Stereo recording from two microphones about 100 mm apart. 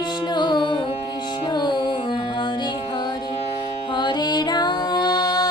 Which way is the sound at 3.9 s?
50° left (ahead or behind).